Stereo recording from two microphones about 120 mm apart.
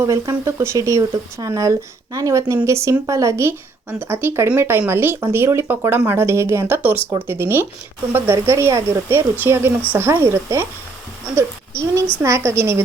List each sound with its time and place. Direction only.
0.0 s a woman's voice: 25° right (ahead or behind)